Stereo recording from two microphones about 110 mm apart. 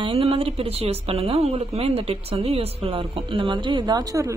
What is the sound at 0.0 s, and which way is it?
Speech, 60° right (ahead or behind).